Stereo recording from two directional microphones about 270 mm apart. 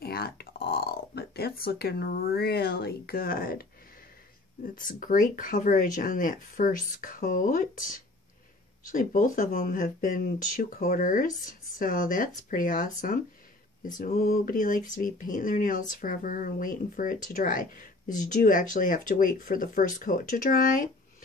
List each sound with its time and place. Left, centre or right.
0.0 s speech: left
4.7 s speech: left
8.9 s speech: left